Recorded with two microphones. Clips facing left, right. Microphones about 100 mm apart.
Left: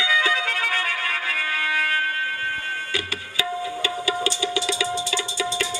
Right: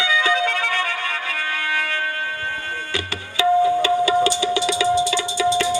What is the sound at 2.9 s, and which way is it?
Music, 25° right (ahead or behind).